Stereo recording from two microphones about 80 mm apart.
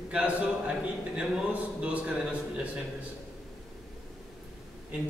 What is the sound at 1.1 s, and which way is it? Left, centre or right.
Speech, centre.